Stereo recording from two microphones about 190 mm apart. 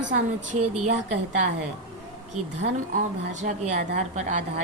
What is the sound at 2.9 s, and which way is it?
Speech, 40° right (ahead or behind).